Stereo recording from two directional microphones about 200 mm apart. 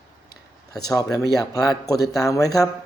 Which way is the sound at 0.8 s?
20° left (ahead or behind).